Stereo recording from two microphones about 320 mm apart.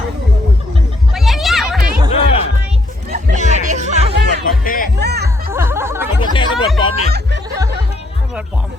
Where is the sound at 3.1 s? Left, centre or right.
Right.